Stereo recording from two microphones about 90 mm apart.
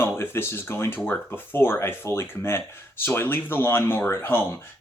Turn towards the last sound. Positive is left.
turn(degrees=25)  # may be behind; listen again after turning